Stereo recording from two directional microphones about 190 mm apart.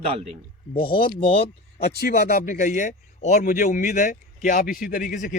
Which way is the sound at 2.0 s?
50° left (ahead or behind).